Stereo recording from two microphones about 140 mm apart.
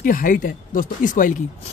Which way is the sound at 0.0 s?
80° left.